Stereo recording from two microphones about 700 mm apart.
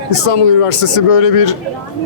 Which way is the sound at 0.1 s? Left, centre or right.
Left.